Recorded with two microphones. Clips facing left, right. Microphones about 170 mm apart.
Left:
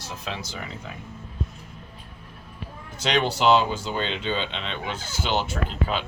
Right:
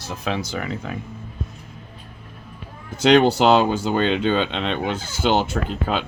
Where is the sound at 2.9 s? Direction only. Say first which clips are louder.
Right 10 dB; 55° right (ahead or behind).